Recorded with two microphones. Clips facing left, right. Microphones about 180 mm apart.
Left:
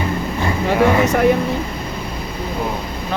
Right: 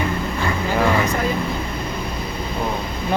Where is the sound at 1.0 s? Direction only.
75° left (ahead or behind).